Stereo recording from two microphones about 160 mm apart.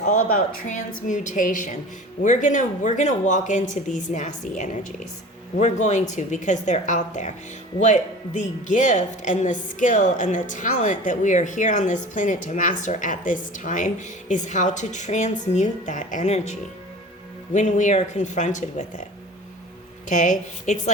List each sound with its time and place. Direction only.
0.0 s speech: 50° left (ahead or behind)
20.1 s speech: 50° left (ahead or behind)